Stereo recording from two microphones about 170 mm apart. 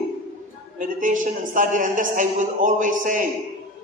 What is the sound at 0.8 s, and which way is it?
A man's voice, 50° right (ahead or behind).